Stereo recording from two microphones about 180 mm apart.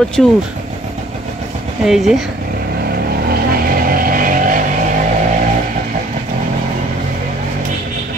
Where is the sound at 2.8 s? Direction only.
60° right (ahead or behind).